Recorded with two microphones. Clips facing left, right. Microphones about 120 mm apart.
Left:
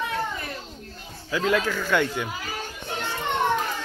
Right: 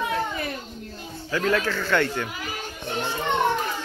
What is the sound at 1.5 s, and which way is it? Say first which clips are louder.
Speech: even; 10° left (ahead or behind).